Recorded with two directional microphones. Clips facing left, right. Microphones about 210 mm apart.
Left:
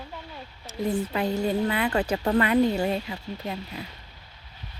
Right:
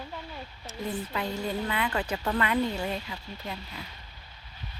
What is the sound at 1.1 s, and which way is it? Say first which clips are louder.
A woman's voice: left 6 dB; 35° left (ahead or behind).